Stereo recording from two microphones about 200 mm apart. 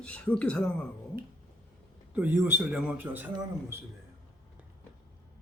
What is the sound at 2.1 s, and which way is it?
Speech, 10° right (ahead or behind).